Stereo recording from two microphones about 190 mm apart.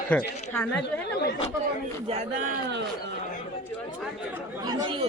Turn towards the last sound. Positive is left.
turn(degrees=-25)  # may be behind; listen again after turning